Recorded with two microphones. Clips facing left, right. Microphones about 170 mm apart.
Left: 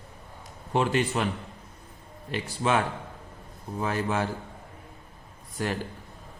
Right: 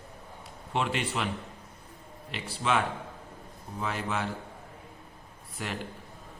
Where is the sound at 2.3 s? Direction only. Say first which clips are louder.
Left 3 dB; 45° left (ahead or behind).